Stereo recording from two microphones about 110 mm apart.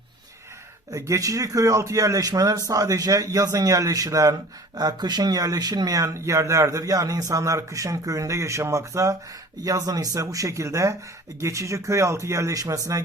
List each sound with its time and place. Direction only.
0.9 s speech: 30° right (ahead or behind)